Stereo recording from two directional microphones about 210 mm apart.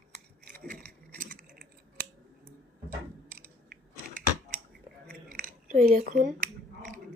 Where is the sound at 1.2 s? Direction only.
40° right (ahead or behind).